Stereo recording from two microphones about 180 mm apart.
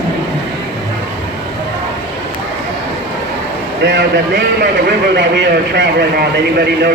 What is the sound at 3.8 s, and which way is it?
A man's voice, 75° right (ahead or behind).